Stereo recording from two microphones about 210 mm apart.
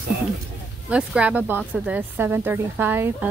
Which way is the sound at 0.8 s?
5° right (ahead or behind).